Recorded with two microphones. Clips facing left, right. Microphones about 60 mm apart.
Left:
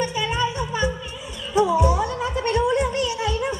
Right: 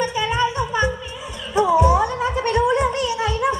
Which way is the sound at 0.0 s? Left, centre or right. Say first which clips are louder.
Right 3 dB; right.